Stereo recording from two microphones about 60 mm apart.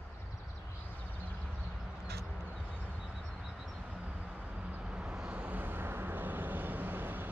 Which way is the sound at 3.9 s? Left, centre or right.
Centre.